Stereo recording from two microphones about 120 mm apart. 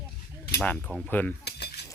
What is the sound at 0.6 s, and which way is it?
Speech, 10° left (ahead or behind).